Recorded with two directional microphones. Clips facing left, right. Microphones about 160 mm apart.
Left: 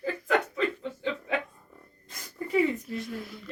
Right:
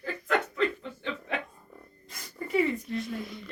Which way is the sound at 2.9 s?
5° left (ahead or behind).